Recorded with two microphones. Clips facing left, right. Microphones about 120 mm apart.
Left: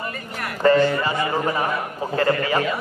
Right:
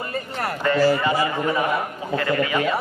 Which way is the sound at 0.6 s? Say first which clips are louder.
Left 7 dB; 35° left (ahead or behind).